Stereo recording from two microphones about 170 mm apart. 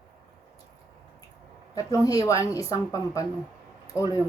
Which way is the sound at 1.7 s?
20° left (ahead or behind).